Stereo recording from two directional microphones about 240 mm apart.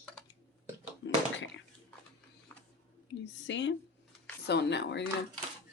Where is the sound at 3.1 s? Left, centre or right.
Left.